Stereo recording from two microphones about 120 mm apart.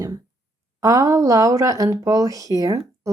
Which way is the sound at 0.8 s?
25° right (ahead or behind).